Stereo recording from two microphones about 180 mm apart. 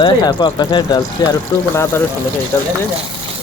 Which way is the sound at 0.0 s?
25° left (ahead or behind).